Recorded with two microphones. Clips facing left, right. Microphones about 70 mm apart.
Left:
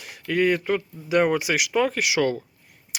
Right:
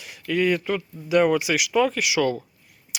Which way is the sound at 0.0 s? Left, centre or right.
Left.